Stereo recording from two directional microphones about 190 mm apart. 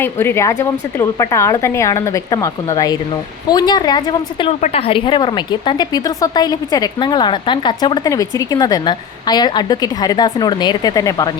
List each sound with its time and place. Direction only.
0.0 s a woman's voice: 10° left (ahead or behind)